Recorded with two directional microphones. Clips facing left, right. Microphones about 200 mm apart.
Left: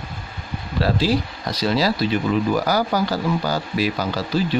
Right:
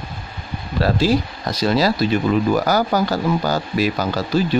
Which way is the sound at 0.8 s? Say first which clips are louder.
Right 3 dB; 45° right (ahead or behind).